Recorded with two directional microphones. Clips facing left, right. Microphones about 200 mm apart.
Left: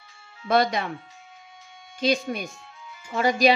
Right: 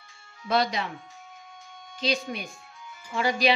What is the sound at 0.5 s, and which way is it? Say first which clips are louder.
Speech: left 4 dB; 50° left (ahead or behind).